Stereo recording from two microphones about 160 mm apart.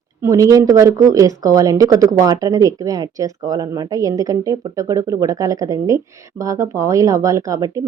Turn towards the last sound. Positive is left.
turn(degrees=-20)  # may be behind; listen again after turning